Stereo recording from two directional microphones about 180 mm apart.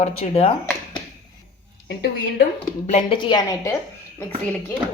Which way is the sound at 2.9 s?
30° left (ahead or behind).